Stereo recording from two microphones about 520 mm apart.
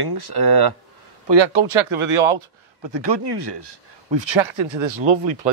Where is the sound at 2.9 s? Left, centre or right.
Right.